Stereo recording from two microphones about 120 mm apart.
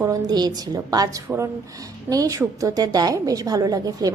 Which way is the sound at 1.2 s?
20° right (ahead or behind).